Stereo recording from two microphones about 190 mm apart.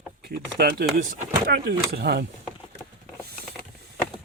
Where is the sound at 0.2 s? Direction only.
55° right (ahead or behind).